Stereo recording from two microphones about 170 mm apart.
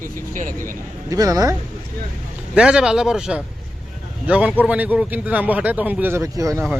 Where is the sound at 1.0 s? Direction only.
20° right (ahead or behind).